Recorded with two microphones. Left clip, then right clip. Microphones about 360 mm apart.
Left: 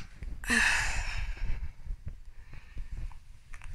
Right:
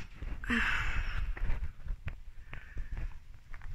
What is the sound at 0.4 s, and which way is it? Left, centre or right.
Sigh, centre.